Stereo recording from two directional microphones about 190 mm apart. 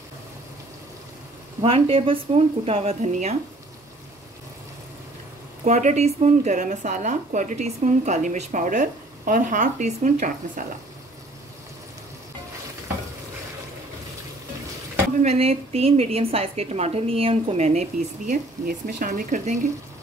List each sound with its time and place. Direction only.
1.6 s speech: 30° right (ahead or behind)
5.7 s speech: 40° right (ahead or behind)
15.2 s speech: 30° right (ahead or behind)